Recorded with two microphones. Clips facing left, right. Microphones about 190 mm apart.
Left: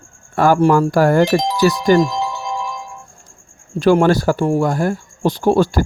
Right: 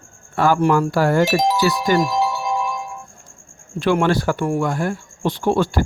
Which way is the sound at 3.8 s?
40° left (ahead or behind).